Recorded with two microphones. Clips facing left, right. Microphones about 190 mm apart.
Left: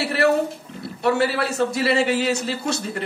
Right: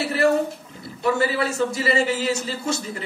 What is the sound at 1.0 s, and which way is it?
A man's voice, 70° left (ahead or behind).